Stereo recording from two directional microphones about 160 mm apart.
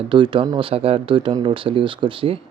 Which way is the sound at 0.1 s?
30° right (ahead or behind).